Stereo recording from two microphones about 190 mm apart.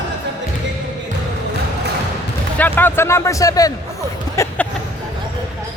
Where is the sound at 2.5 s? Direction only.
10° left (ahead or behind).